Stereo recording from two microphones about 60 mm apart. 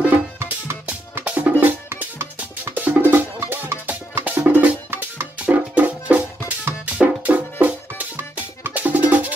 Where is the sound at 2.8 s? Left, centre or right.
Right.